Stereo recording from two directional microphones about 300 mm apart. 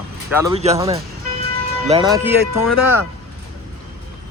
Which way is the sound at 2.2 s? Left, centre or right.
Centre.